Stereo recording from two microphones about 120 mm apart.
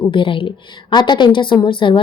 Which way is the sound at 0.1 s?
45° left (ahead or behind).